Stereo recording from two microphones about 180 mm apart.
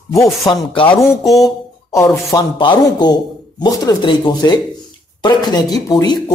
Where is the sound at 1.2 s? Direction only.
Centre (ahead or behind).